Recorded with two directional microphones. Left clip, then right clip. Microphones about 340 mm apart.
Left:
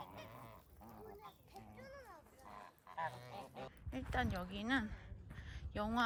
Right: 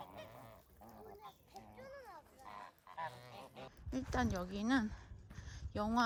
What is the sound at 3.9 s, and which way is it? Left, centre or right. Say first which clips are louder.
A woman's voice: right 2 dB; centre.